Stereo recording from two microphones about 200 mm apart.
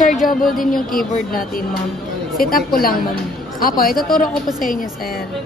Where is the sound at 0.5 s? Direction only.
45° left (ahead or behind).